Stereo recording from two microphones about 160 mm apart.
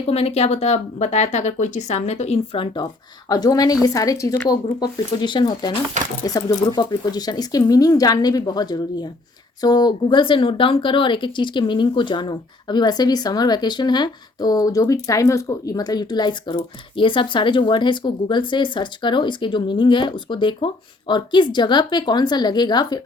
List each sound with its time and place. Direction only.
0.1 s speech: 40° left (ahead or behind)
3.2 s speech: 25° left (ahead or behind)